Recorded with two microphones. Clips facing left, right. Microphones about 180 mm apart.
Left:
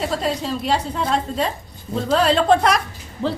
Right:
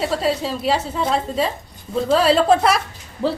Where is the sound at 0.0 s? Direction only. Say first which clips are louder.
Right 2 dB; centre (ahead or behind).